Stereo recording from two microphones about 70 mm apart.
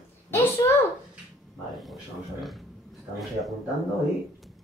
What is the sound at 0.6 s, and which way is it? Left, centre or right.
Speech, left.